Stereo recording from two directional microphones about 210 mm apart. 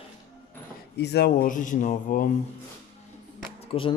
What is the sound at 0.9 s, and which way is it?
Speech, 50° left (ahead or behind).